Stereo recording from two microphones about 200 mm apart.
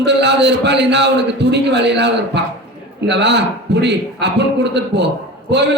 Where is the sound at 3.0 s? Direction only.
60° right (ahead or behind).